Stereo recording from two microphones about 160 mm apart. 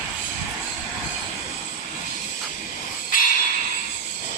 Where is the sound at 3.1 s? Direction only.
60° left (ahead or behind).